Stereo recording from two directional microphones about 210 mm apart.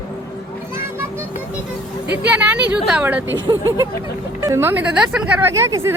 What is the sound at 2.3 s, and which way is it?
Speech, 5° right (ahead or behind).